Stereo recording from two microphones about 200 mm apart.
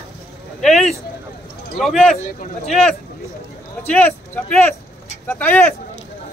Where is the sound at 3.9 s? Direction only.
5° left (ahead or behind).